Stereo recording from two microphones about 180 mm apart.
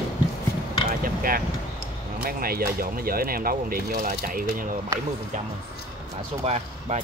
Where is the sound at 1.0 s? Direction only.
50° right (ahead or behind).